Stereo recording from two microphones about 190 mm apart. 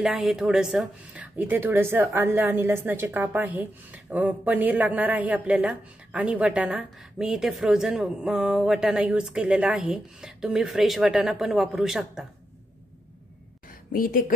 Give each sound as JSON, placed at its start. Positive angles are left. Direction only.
{"t": 0.0, "sound": "speech", "side_deg": 0}
{"t": 13.9, "sound": "speech", "side_deg": 50}